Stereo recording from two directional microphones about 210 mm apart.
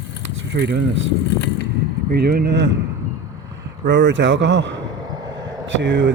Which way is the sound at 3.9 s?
60° right (ahead or behind).